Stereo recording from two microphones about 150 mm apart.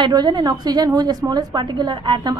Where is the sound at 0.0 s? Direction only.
30° right (ahead or behind).